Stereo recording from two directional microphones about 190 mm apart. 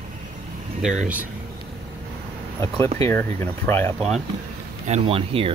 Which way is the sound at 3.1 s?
10° left (ahead or behind).